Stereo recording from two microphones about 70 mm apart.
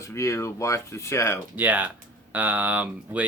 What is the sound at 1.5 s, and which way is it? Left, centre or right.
Speech, right.